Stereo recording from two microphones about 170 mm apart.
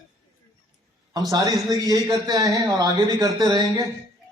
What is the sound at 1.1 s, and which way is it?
Speech, 20° right (ahead or behind).